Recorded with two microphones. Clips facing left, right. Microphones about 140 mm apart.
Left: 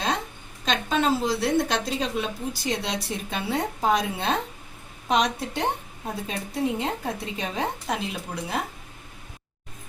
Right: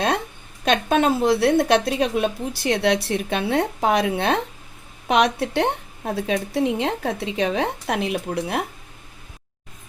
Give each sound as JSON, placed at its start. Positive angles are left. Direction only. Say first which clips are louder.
{"t": 0.6, "sound": "a woman's voice", "louder": "right 5 dB", "side_deg": -60}
{"t": 6.2, "sound": "speech", "louder": "right 5 dB", "side_deg": -80}